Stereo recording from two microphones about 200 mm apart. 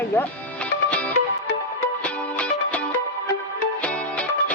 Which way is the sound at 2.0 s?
5° left (ahead or behind).